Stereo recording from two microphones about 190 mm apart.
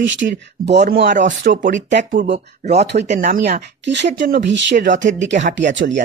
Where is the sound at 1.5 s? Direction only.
40° right (ahead or behind).